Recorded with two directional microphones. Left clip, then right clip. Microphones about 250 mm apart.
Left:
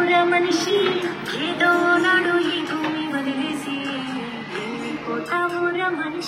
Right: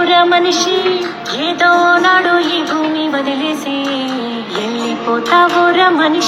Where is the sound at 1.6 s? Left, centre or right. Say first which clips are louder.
Right 8 dB; right.